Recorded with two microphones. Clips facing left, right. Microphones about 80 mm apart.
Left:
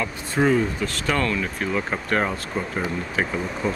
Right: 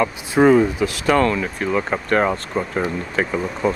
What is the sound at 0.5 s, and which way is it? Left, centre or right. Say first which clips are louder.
Speech: right 7 dB; centre.